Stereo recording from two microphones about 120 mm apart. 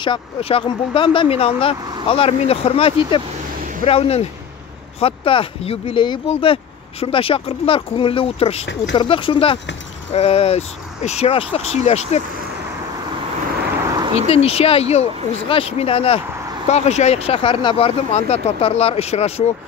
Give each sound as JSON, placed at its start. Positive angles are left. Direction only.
{"t": 0.0, "sound": "speech", "side_deg": 50}
{"t": 14.1, "sound": "speech", "side_deg": 60}
{"t": 16.6, "sound": "speech", "side_deg": 65}